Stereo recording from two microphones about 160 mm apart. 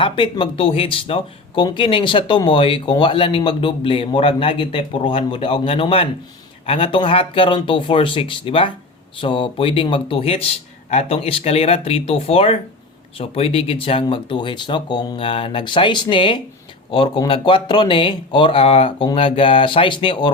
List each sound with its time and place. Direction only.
0.0 s speech: 30° left (ahead or behind)